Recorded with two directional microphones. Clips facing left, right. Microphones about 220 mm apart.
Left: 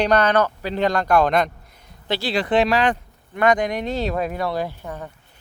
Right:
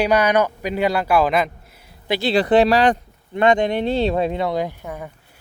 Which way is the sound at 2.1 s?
15° right (ahead or behind).